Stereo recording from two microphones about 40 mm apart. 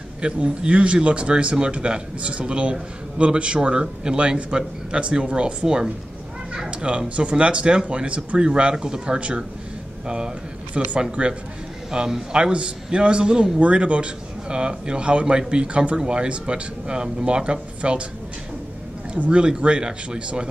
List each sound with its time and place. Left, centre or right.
0.2 s a man's voice: right
19.1 s speech: right
19.4 s a man's voice: right